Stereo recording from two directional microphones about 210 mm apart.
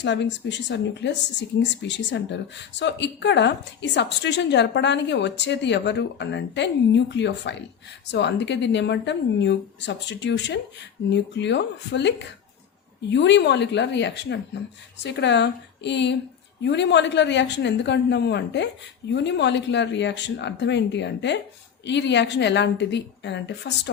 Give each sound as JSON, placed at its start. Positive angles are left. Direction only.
{"t": 0.0, "sound": "speech", "side_deg": 55}